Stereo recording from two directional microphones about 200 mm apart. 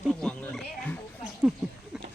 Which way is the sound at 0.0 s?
5° left (ahead or behind).